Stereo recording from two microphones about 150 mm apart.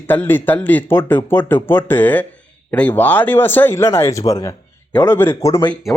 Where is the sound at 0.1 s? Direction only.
10° left (ahead or behind).